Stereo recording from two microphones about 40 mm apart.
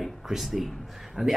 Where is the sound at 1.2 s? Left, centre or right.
Centre.